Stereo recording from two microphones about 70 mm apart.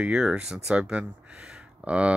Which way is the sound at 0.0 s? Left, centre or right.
Centre.